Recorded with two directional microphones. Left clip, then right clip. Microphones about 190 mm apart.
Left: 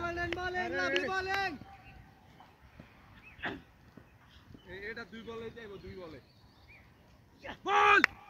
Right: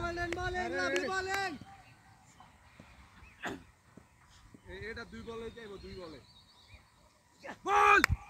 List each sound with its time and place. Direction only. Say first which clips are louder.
0.0 s speech: left 1 dB; centre (ahead or behind)
3.4 s a sound: left 2 dB; 65° right (ahead or behind)
4.6 s speech: left 1 dB; 25° right (ahead or behind)
7.6 s speech: even; 20° right (ahead or behind)